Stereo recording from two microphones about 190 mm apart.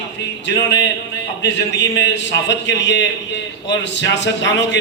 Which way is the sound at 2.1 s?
70° left (ahead or behind).